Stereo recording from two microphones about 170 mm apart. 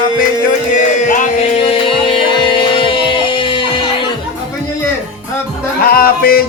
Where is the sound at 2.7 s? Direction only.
30° left (ahead or behind).